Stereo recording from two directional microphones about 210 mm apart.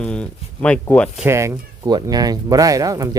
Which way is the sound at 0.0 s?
5° left (ahead or behind).